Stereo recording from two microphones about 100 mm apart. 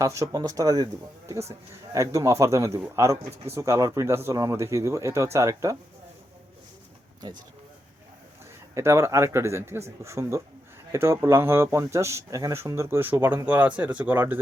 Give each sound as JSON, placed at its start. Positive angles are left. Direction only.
{"t": 0.0, "sound": "speech", "side_deg": -30}
{"t": 7.2, "sound": "speech", "side_deg": -45}
{"t": 8.7, "sound": "speech", "side_deg": -30}